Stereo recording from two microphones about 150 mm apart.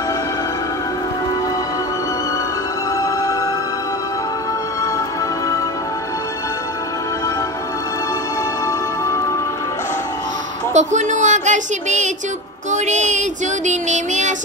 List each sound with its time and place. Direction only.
10.7 s a woman's voice: 50° right (ahead or behind)
12.7 s child singing: 50° right (ahead or behind)